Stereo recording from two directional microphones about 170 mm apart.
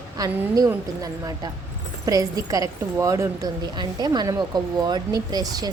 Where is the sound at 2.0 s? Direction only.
20° right (ahead or behind).